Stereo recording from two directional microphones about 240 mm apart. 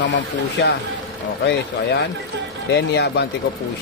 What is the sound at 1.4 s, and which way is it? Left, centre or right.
Speech, left.